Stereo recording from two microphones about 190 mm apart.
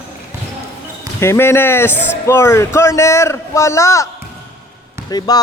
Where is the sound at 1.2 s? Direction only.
15° left (ahead or behind).